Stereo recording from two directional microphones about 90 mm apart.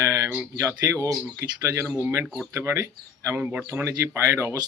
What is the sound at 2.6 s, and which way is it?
Speech, 30° right (ahead or behind).